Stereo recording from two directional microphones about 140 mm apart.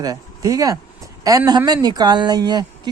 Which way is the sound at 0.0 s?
25° right (ahead or behind).